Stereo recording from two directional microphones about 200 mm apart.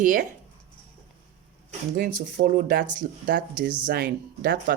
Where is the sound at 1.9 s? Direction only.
50° right (ahead or behind).